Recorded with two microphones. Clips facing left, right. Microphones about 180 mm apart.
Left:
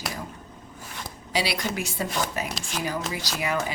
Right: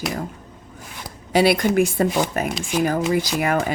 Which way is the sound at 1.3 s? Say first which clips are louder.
Right 11 dB; 50° right (ahead or behind).